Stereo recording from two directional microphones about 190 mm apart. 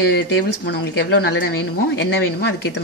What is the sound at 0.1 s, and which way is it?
Speech, 60° left (ahead or behind).